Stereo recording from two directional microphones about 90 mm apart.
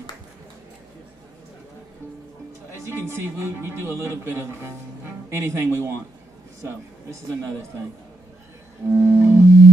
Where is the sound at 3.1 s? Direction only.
25° right (ahead or behind).